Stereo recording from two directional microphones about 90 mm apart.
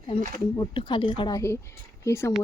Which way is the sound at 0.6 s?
55° left (ahead or behind).